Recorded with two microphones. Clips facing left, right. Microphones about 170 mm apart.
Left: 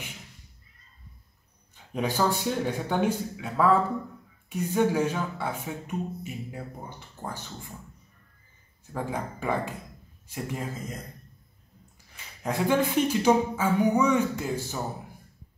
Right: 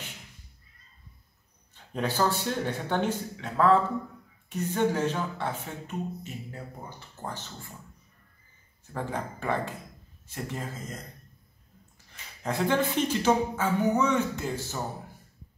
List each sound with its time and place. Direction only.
2.0 s speech: 10° left (ahead or behind)
8.9 s speech: 10° left (ahead or behind)
12.1 s speech: 10° left (ahead or behind)